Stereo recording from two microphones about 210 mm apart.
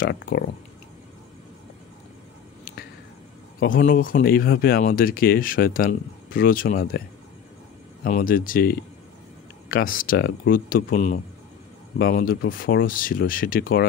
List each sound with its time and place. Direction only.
0.0 s speech: 45° left (ahead or behind)
3.5 s speech: 40° left (ahead or behind)
8.0 s speech: 40° left (ahead or behind)